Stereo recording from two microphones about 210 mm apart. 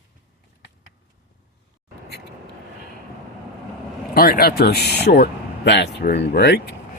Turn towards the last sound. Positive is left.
turn(degrees=50)  # may be behind; listen again after turning